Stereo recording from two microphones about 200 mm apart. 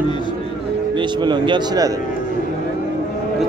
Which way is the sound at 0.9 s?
25° right (ahead or behind).